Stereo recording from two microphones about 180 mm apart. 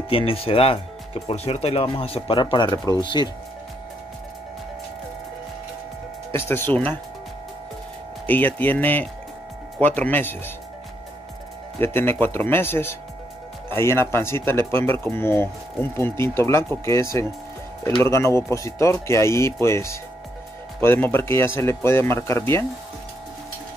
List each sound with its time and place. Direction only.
0.1 s speech: 30° left (ahead or behind)
6.3 s speech: 10° left (ahead or behind)
8.3 s speech: 10° left (ahead or behind)
11.8 s speech: 10° left (ahead or behind)